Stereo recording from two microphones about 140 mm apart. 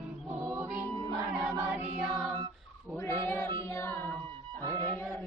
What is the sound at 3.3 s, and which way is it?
Child singing, 15° left (ahead or behind).